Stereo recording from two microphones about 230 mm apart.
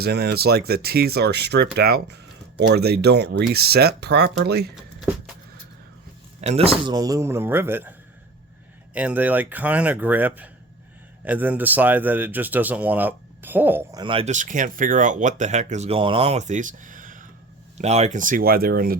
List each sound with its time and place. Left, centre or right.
0.0 s speech: right
6.4 s speech: right; by 7.9 s centre
9.0 s speech: centre
14.0 s speech: right